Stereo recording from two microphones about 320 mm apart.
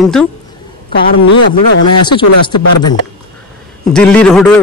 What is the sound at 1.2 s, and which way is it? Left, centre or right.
Speech, left.